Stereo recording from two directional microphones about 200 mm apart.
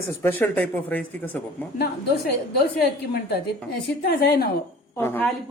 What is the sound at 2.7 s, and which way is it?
A woman's voice, 55° left (ahead or behind).